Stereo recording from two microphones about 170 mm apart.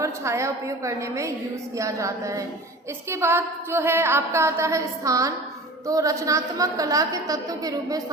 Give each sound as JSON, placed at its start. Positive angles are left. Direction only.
{"t": 0.0, "sound": "a woman's voice", "side_deg": -15}